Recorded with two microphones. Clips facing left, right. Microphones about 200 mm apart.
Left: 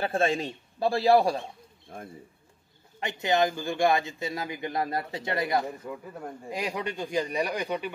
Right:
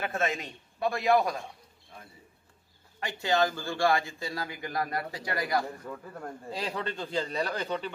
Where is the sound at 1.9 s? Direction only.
50° left (ahead or behind).